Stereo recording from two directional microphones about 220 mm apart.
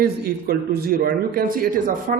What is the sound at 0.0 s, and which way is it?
A man's voice, 45° right (ahead or behind).